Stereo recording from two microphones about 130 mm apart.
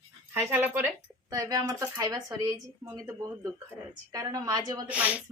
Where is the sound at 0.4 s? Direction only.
15° right (ahead or behind).